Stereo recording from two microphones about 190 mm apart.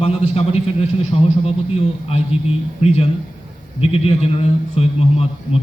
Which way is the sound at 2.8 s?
30° left (ahead or behind).